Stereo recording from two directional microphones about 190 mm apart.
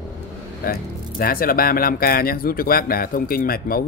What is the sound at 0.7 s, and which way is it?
Speech, 50° left (ahead or behind).